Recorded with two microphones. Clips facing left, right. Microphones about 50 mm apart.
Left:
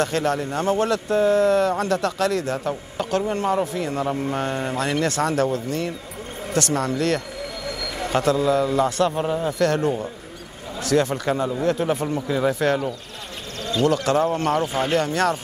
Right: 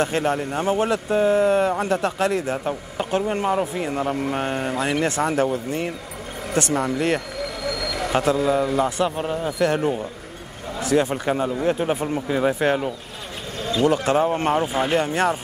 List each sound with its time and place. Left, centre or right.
0.0 s speech: right
7.6 s a sound: right
8.1 s a man's voice: centre